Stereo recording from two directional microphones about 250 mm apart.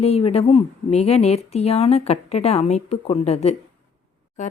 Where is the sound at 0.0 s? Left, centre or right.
Left.